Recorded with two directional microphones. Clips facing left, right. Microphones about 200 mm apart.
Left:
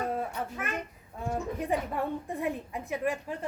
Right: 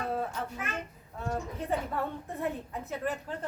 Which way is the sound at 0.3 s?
60° left (ahead or behind).